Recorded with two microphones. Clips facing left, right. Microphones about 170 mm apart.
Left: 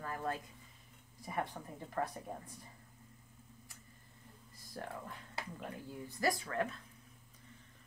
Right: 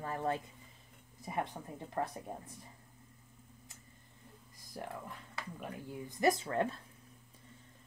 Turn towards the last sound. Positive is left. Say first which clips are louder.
# right 3 dB
turn(degrees=-30)  # may be behind; listen again after turning